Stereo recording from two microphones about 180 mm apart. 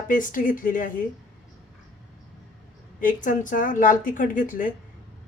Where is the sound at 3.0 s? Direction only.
45° left (ahead or behind).